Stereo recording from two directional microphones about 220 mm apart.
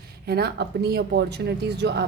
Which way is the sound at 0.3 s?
45° right (ahead or behind).